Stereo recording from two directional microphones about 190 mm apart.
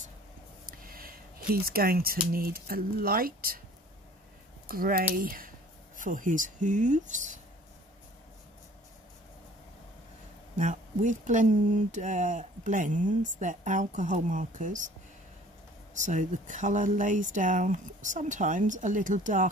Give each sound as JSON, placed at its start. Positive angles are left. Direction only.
{"t": 0.7, "sound": "speech", "side_deg": -50}
{"t": 4.6, "sound": "speech", "side_deg": -50}
{"t": 10.6, "sound": "speech", "side_deg": -40}
{"t": 15.9, "sound": "speech", "side_deg": -40}